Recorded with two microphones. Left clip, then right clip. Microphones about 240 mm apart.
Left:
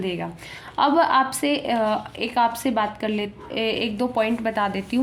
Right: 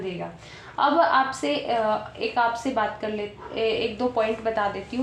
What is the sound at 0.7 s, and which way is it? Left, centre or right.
A woman's voice, left.